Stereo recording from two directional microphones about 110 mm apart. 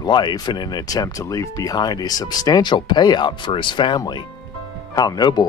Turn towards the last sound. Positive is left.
turn(degrees=35)  # may be behind; listen again after turning